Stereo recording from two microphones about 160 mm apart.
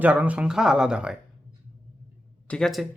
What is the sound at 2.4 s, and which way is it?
Speech, 5° left (ahead or behind).